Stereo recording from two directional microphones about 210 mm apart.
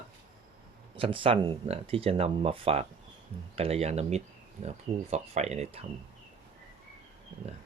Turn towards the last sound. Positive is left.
turn(degrees=-30)  # may be behind; listen again after turning